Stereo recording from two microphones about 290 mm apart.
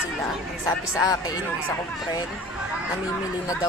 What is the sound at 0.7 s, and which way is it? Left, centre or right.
Speech, centre.